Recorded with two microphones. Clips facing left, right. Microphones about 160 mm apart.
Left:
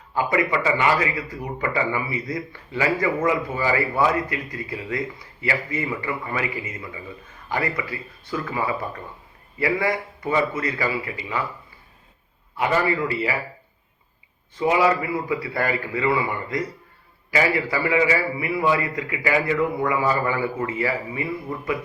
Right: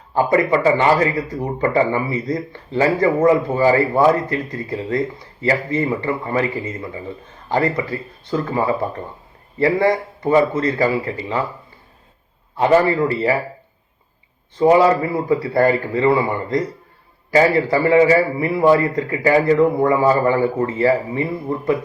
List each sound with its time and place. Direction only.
0.2 s a man's voice: 40° right (ahead or behind)
12.5 s a man's voice: 40° right (ahead or behind)
14.6 s a man's voice: 35° right (ahead or behind)